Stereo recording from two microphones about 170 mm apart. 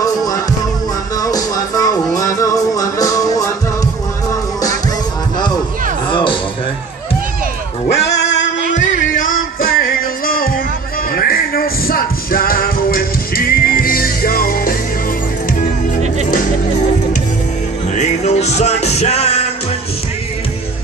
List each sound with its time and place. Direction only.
0.0 s music: 20° left (ahead or behind)
6.0 s music: 30° left (ahead or behind)
8.2 s music: 90° left
8.7 s music: 50° left (ahead or behind)
17.9 s music: 40° left (ahead or behind)